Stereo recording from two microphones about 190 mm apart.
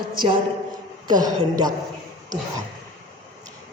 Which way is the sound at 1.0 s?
20° right (ahead or behind).